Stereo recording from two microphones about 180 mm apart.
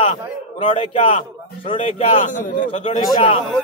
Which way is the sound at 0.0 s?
30° left (ahead or behind).